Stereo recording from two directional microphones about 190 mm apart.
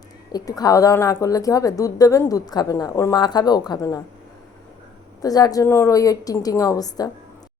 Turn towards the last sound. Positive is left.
turn(degrees=20)  # may be behind; listen again after turning